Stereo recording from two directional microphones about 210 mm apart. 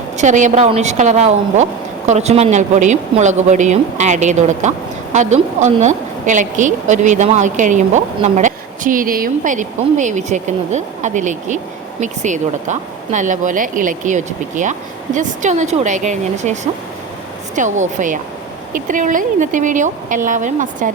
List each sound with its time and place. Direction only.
0.2 s a woman's voice: 35° right (ahead or behind)